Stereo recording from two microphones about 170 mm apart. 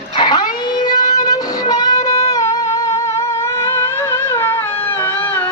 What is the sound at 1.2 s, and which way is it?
Music, 20° left (ahead or behind).